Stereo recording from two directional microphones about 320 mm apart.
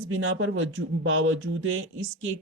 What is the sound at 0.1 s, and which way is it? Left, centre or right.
Speech, right.